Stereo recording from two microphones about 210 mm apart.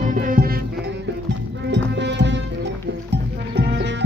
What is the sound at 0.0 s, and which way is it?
Music, 40° right (ahead or behind).